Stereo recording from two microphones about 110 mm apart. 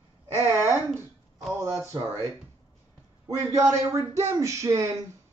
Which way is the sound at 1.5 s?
25° right (ahead or behind).